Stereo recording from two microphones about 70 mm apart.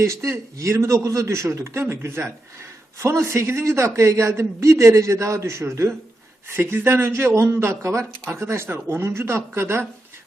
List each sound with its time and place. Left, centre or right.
0.0 s a man's voice: right